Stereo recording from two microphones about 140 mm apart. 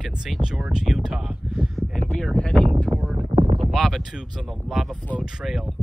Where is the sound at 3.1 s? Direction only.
35° right (ahead or behind).